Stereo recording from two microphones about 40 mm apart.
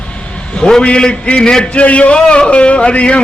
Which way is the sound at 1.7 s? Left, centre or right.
Left.